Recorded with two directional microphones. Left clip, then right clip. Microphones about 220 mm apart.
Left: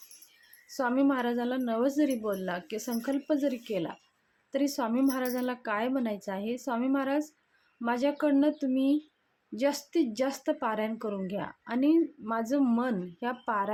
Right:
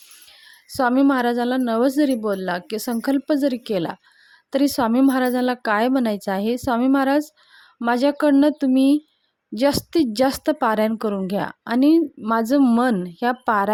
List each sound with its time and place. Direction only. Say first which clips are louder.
0.7 s a woman's voice: right 10 dB; 45° right (ahead or behind)